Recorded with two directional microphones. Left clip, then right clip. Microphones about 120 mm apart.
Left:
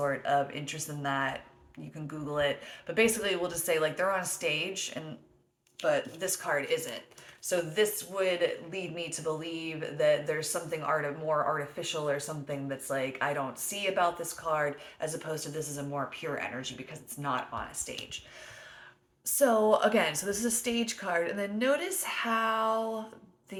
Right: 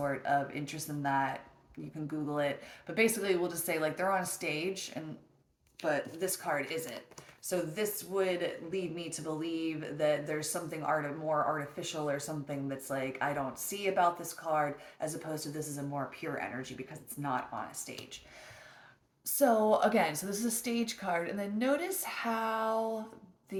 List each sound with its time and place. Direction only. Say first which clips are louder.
0.0 s a woman's voice: left 3 dB; 15° left (ahead or behind)
6.1 s speech: left 3 dB; 20° left (ahead or behind)
19.2 s a woman's voice: left 2 dB; 15° left (ahead or behind)